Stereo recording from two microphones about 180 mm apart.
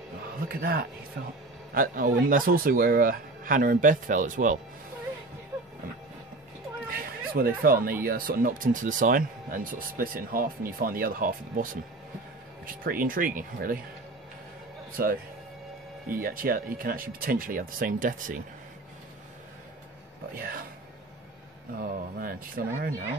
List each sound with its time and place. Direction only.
0.5 s speech: 55° right (ahead or behind)
6.9 s chatter: 55° right (ahead or behind)
8.0 s speech: 55° right (ahead or behind)
15.0 s speech: 55° right (ahead or behind)
20.3 s speech: 55° right (ahead or behind)
21.7 s speech: 55° right (ahead or behind)